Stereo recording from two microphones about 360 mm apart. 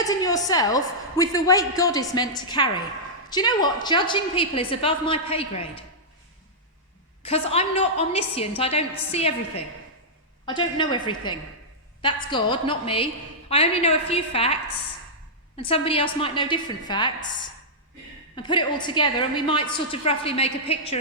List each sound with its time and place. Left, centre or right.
0.0 s a woman's voice: centre
7.2 s a woman's voice: centre
10.4 s a woman's voice: centre
18.3 s a woman's voice: centre